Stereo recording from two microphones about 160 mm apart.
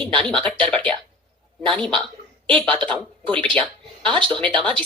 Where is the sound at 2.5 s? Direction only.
5° left (ahead or behind).